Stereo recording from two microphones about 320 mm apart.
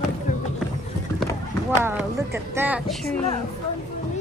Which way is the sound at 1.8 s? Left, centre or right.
Centre.